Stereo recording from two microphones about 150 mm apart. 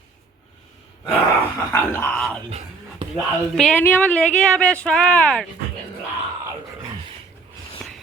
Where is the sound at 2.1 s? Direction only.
5° left (ahead or behind).